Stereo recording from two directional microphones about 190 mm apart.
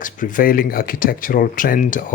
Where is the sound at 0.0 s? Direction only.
45° left (ahead or behind).